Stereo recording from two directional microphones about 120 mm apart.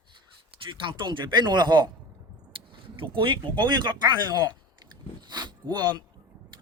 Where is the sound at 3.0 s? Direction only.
45° right (ahead or behind).